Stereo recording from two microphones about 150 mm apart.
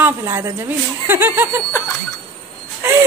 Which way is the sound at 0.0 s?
15° right (ahead or behind).